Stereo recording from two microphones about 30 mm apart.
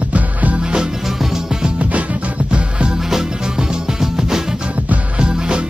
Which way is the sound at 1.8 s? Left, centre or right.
Right.